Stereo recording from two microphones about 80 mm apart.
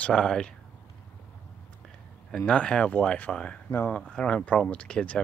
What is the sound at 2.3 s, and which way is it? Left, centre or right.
Speech, centre.